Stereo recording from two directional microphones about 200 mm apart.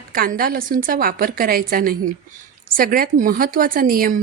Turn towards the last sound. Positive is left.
turn(degrees=-45)  # may be behind; listen again after turning